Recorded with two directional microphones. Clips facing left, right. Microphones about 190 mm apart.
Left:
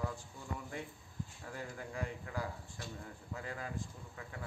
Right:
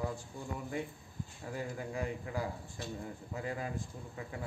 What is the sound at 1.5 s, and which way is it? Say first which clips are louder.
A man's voice: right 7 dB; 15° right (ahead or behind).